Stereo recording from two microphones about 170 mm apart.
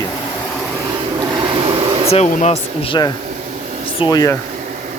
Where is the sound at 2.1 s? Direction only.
40° left (ahead or behind); by 4.4 s 20° left (ahead or behind).